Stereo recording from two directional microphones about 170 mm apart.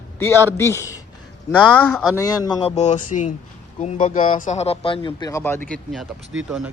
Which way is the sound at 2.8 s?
45° left (ahead or behind).